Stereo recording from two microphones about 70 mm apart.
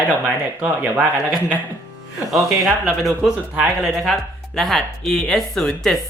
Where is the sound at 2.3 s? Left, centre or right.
Centre.